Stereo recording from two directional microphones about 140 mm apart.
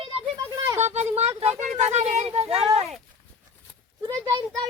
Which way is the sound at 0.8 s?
55° right (ahead or behind).